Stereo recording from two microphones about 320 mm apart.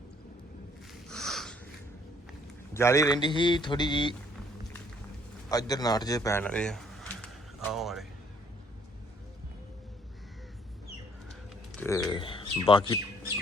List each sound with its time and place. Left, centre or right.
1.1 s a sound: centre
2.7 s a man's voice: centre
5.5 s a man's voice: centre
11.7 s speech: centre